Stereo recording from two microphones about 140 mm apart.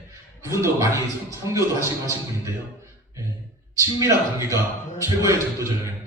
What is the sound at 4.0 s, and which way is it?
A man's voice, 25° right (ahead or behind).